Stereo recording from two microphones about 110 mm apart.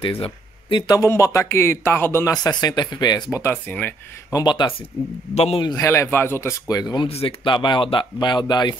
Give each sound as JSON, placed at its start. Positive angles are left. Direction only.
{"t": 0.2, "sound": "speech", "side_deg": 45}
{"t": 0.9, "sound": "speech", "side_deg": 25}
{"t": 2.4, "sound": "speech", "side_deg": 40}
{"t": 3.3, "sound": "speech", "side_deg": 25}
{"t": 4.3, "sound": "speech", "side_deg": 40}
{"t": 5.3, "sound": "a man's voice", "side_deg": 70}
{"t": 5.8, "sound": "speech", "side_deg": 25}
{"t": 6.7, "sound": "speech", "side_deg": 35}
{"t": 7.1, "sound": "speech", "side_deg": 65}
{"t": 7.4, "sound": "speech", "side_deg": 45}